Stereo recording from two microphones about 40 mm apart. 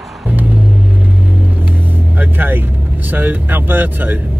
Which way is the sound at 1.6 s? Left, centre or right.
Right.